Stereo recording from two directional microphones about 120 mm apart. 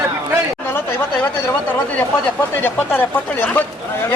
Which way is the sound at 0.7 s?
20° left (ahead or behind).